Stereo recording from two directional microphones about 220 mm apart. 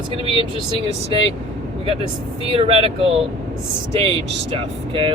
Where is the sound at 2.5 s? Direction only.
25° right (ahead or behind).